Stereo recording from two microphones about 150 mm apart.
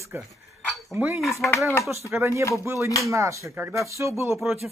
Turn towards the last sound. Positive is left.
turn(degrees=-20)  # may be behind; listen again after turning